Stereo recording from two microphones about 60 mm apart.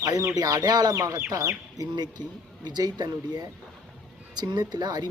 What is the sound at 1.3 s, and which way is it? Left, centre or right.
Speech, right.